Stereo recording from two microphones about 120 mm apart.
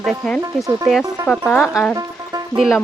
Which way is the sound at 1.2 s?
30° right (ahead or behind).